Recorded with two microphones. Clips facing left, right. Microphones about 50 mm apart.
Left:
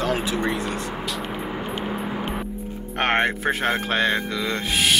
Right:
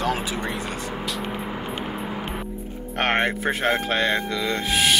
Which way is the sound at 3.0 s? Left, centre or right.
Centre.